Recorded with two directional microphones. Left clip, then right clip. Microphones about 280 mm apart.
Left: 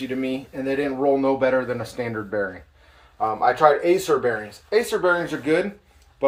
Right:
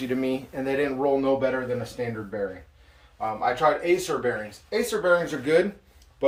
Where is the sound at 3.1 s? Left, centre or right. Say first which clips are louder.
Left 5 dB; centre.